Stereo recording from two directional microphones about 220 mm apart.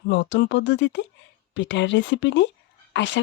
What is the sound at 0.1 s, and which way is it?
Speech, 55° left (ahead or behind).